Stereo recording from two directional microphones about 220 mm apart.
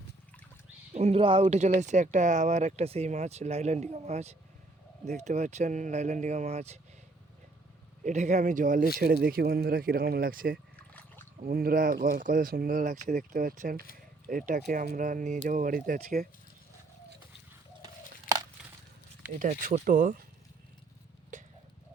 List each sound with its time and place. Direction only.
0.9 s speech: 30° right (ahead or behind)
8.0 s speech: 30° right (ahead or behind)
18.3 s a sound: 40° left (ahead or behind)
19.4 s speech: 35° right (ahead or behind)
21.3 s clip-clop: 35° right (ahead or behind)